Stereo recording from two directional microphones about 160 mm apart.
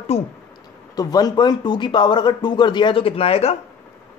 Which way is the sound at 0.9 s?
25° left (ahead or behind).